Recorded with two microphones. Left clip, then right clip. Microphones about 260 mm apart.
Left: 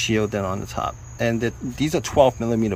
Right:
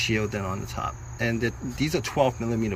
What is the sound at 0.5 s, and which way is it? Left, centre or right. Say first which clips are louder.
Cricket: left 5 dB; left.